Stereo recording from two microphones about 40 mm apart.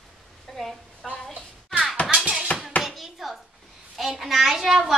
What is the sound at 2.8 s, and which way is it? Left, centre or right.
Chopping, centre.